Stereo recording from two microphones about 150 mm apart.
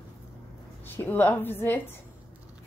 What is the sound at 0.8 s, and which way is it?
A woman's voice, 15° left (ahead or behind).